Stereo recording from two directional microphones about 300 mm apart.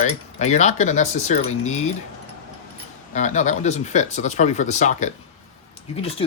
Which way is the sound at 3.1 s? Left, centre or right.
Left.